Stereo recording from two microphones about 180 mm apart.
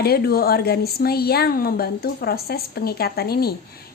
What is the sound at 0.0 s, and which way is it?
A woman's voice, 60° left (ahead or behind).